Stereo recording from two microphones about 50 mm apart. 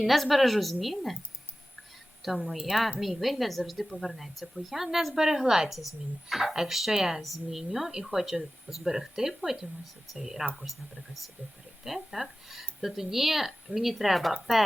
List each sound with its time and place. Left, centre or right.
0.0 s a woman's voice: centre
2.2 s a woman's voice: centre
11.9 s a woman's voice: centre